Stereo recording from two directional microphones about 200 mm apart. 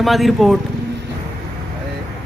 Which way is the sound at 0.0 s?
Centre (ahead or behind).